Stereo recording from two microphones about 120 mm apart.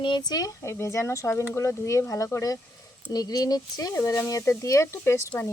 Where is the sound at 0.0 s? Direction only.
40° left (ahead or behind).